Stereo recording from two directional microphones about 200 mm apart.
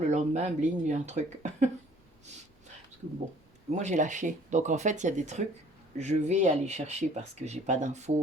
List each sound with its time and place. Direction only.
0.1 s speech: 35° right (ahead or behind)
3.7 s speech: 35° right (ahead or behind)